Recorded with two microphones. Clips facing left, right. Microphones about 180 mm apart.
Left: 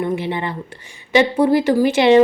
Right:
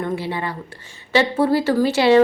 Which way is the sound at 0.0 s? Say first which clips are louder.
Left 3 dB; 20° left (ahead or behind).